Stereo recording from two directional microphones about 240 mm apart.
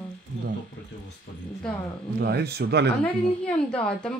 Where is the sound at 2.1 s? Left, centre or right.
Right.